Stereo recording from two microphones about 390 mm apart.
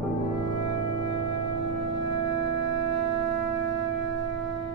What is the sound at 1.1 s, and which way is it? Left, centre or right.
Music, left.